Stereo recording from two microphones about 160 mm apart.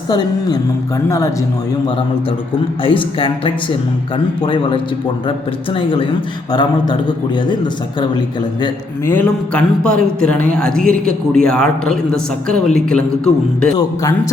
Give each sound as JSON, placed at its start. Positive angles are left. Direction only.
{"t": 1.0, "sound": "a man's voice", "side_deg": 20}
{"t": 2.8, "sound": "a man's voice", "side_deg": 35}
{"t": 9.0, "sound": "speech", "side_deg": 10}
{"t": 13.7, "sound": "a man's voice", "side_deg": 20}